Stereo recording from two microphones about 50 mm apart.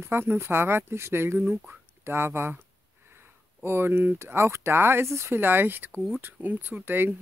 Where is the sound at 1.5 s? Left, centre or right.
Centre.